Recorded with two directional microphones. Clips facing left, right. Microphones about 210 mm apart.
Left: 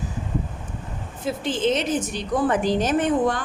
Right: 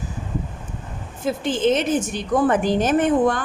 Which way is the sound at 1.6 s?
50° right (ahead or behind).